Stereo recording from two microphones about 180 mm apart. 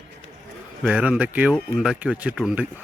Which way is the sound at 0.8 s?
5° right (ahead or behind).